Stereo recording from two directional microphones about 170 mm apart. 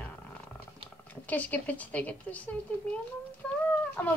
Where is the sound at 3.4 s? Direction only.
5° left (ahead or behind).